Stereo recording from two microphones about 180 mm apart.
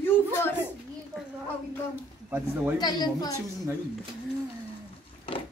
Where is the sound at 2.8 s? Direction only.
20° left (ahead or behind).